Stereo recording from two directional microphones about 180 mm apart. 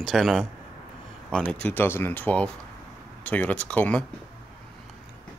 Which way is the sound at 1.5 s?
10° left (ahead or behind).